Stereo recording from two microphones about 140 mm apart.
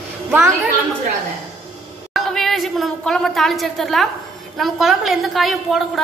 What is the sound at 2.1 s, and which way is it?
A woman's voice, centre (ahead or behind).